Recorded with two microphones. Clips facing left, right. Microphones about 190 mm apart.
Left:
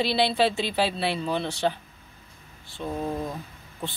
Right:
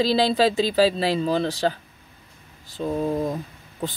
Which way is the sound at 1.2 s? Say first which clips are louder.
Right 5 dB; 40° right (ahead or behind).